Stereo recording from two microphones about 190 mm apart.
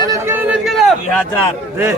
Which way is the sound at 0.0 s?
15° right (ahead or behind).